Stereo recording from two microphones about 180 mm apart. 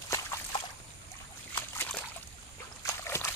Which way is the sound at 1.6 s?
10° left (ahead or behind).